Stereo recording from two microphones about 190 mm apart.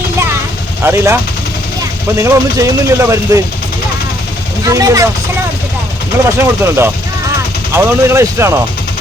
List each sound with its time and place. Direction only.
0.8 s speech: 15° right (ahead or behind)
4.7 s speech: 15° right (ahead or behind)
6.4 s speech: 10° right (ahead or behind)